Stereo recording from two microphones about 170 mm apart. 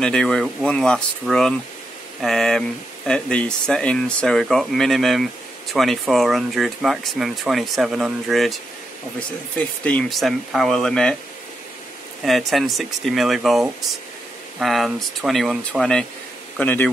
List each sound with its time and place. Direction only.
0.0 s speech: 5° left (ahead or behind)
9.6 s speech: 10° left (ahead or behind)
12.3 s speech: centre (ahead or behind)